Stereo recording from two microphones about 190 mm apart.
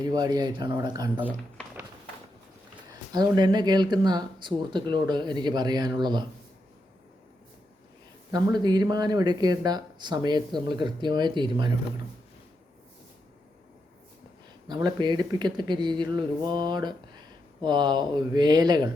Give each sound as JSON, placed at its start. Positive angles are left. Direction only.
{"t": 0.0, "sound": "speech", "side_deg": -20}
{"t": 3.1, "sound": "speech", "side_deg": -20}
{"t": 8.3, "sound": "speech", "side_deg": -20}
{"t": 14.7, "sound": "speech", "side_deg": -20}